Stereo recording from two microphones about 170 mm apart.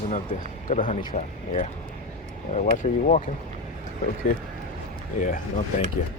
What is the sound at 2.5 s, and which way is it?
Speech, 45° left (ahead or behind).